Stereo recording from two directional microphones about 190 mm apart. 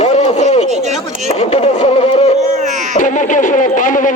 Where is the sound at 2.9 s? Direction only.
40° left (ahead or behind).